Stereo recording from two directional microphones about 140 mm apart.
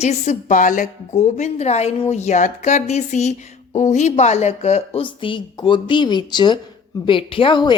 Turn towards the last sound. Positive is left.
turn(degrees=35)  # may be behind; listen again after turning